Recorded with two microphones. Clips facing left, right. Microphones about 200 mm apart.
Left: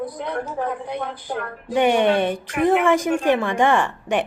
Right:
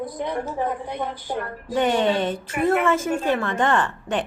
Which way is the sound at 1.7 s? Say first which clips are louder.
Left 3 dB; 15° left (ahead or behind).